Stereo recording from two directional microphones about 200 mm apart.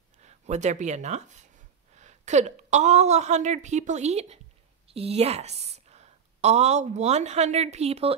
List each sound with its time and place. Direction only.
0.2 s a woman's voice: 35° right (ahead or behind)